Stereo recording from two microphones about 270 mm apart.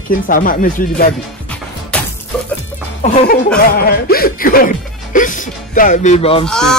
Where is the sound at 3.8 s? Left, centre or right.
Left.